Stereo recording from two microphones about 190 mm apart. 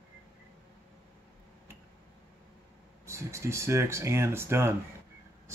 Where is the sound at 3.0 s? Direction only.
15° right (ahead or behind).